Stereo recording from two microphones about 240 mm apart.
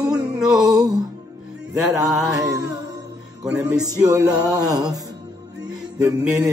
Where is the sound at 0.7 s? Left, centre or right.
Centre.